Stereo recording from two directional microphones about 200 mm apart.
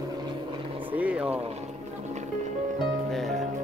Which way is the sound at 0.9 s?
5° right (ahead or behind).